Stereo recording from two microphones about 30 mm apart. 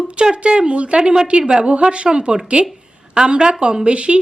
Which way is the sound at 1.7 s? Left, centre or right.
Right.